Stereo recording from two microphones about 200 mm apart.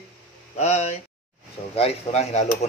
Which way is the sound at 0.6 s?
35° left (ahead or behind).